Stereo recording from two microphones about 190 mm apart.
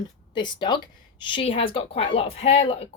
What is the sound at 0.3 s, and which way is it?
Speech, 25° left (ahead or behind).